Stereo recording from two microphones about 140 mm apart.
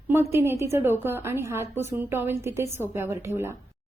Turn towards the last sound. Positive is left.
turn(degrees=-20)  # may be behind; listen again after turning